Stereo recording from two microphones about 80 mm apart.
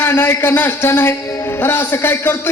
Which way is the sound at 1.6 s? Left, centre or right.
Left.